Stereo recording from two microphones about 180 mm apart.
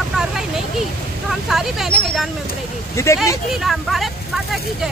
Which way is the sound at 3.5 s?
Centre (ahead or behind).